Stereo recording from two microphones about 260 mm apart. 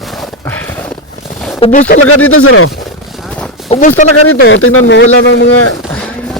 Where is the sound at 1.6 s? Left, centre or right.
Left.